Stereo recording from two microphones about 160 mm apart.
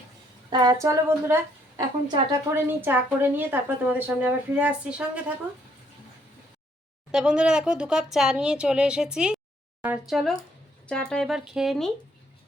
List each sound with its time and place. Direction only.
0.5 s a woman's voice: 25° right (ahead or behind); by 5.2 s 10° right (ahead or behind)
7.1 s speech: 5° right (ahead or behind)